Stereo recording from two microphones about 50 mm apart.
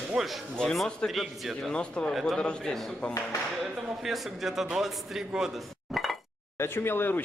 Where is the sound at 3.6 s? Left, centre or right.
Centre.